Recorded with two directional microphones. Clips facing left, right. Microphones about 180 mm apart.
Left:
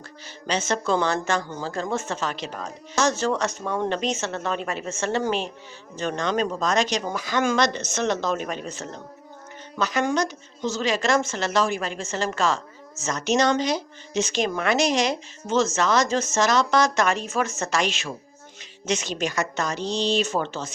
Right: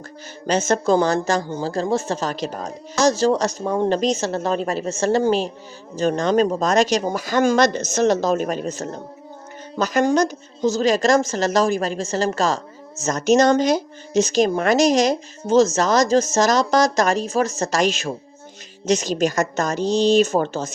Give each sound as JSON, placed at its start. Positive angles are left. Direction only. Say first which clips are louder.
{"t": 0.4, "sound": "speech", "louder": "right 6 dB", "side_deg": -45}